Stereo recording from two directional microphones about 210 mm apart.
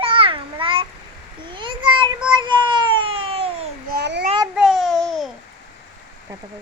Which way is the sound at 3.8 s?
50° right (ahead or behind).